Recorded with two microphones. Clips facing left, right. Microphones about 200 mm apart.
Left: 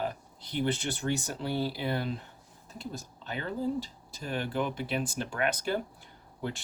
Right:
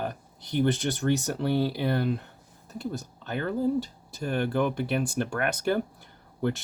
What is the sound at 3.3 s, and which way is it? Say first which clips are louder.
Speech: right 6 dB; 55° right (ahead or behind).